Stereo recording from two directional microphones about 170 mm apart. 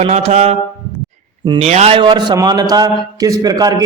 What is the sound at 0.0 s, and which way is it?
A man's voice, 40° right (ahead or behind).